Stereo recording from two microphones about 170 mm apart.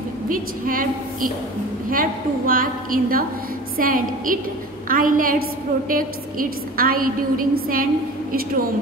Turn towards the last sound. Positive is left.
turn(degrees=-55)  # may be behind; listen again after turning